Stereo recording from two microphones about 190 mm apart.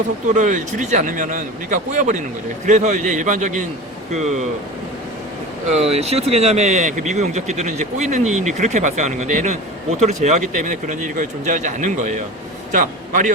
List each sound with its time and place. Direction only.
0.3 s speech: 40° right (ahead or behind)
5.7 s a man's voice: 35° right (ahead or behind)